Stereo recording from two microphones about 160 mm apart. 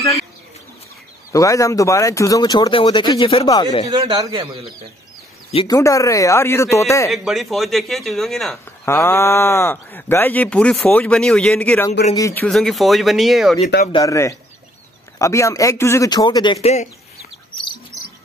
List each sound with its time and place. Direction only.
1.3 s speech: 20° left (ahead or behind)
3.4 s speech: 25° left (ahead or behind)
4.0 s a man's voice: 25° right (ahead or behind)
5.7 s speech: 20° left (ahead or behind)
7.1 s speech: centre (ahead or behind)
8.8 s speech: 15° left (ahead or behind)
12.4 s speech: centre (ahead or behind)
13.9 s speech: 20° left (ahead or behind)
16.6 s speech: 45° left (ahead or behind)